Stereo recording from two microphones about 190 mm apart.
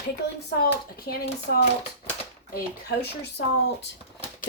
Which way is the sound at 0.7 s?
55° left (ahead or behind).